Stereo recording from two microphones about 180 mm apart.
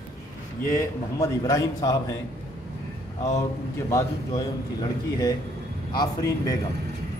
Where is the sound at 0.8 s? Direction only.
20° left (ahead or behind).